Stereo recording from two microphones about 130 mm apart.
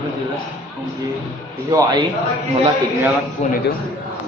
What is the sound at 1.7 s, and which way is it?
Speech, 30° right (ahead or behind).